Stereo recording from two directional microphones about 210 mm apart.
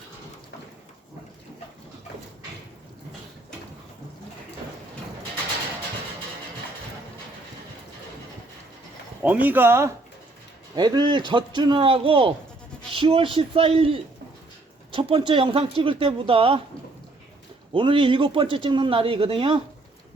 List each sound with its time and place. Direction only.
9.2 s speech: 10° right (ahead or behind); by 16.6 s 25° right (ahead or behind)
17.7 s speech: 25° right (ahead or behind)